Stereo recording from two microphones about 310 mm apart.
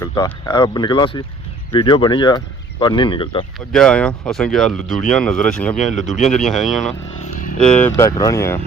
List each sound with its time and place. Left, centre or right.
0.0 s speech: centre
3.7 s speech: centre